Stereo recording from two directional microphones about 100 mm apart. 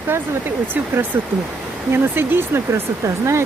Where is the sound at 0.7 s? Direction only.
20° right (ahead or behind).